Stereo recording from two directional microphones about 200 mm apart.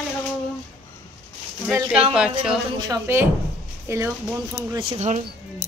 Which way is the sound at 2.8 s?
15° right (ahead or behind).